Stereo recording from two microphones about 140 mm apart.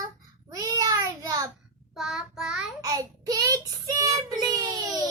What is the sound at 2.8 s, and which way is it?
Child singing, 25° right (ahead or behind).